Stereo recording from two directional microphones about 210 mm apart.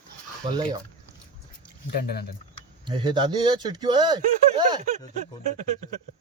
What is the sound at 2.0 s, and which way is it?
Speech, 50° left (ahead or behind).